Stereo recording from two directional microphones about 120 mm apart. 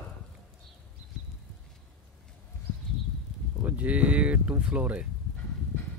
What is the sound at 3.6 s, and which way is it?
Speech, 10° right (ahead or behind).